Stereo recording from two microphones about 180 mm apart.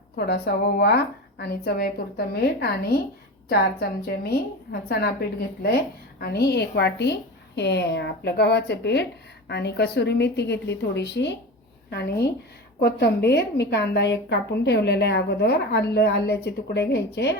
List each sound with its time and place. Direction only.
0.2 s a woman's voice: 65° left (ahead or behind)